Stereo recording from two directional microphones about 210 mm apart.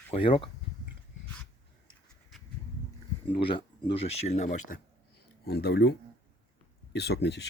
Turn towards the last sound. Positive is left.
turn(degrees=55)  # may be behind; listen again after turning